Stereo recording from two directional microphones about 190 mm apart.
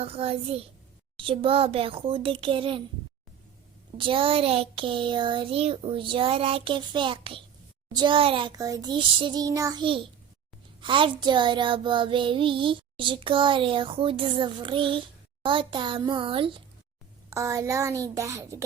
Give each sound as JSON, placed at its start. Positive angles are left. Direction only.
{"t": 0.0, "sound": "a child's voice", "side_deg": -30}
{"t": 1.2, "sound": "child singing", "side_deg": -25}
{"t": 3.9, "sound": "child singing", "side_deg": -25}
{"t": 17.2, "sound": "a woman's voice", "side_deg": -15}